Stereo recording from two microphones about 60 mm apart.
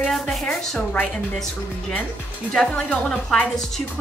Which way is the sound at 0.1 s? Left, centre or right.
Centre.